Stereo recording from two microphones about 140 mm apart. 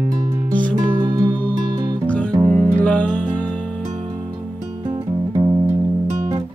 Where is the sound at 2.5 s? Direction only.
5° left (ahead or behind).